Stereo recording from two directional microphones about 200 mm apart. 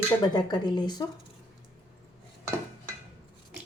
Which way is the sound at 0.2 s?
20° left (ahead or behind).